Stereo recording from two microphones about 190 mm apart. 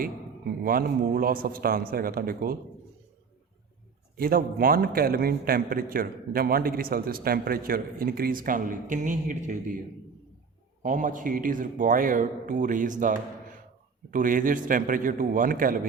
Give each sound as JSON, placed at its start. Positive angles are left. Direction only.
{"t": 0.6, "sound": "a man's voice", "side_deg": -50}
{"t": 4.2, "sound": "a man's voice", "side_deg": -50}
{"t": 10.8, "sound": "a man's voice", "side_deg": -45}